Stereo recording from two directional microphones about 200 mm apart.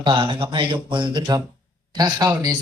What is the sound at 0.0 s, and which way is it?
Speech, 25° right (ahead or behind).